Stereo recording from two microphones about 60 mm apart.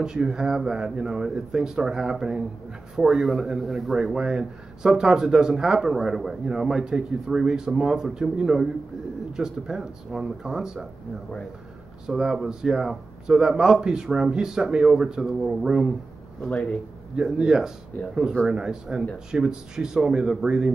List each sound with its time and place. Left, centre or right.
0.0 s a man's voice: centre
12.1 s a man's voice: centre
17.1 s a man's voice: centre
18.0 s speech: left
18.5 s a man's voice: centre